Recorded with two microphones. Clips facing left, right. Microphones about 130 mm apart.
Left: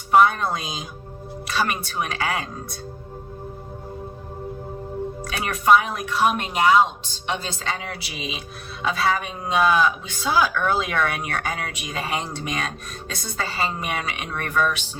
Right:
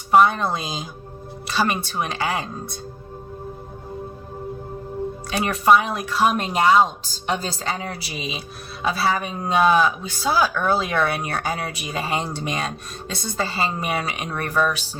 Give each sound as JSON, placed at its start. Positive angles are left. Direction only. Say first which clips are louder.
{"t": 0.1, "sound": "a woman's voice", "louder": "right 1 dB", "side_deg": -25}
{"t": 5.4, "sound": "a man's voice", "louder": "right 1 dB", "side_deg": -30}